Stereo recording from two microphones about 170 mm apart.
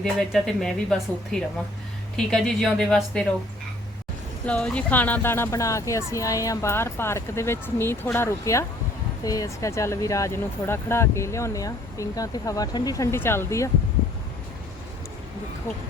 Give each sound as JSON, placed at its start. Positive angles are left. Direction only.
{"t": 0.0, "sound": "speech", "side_deg": 5}
{"t": 4.4, "sound": "speech", "side_deg": 5}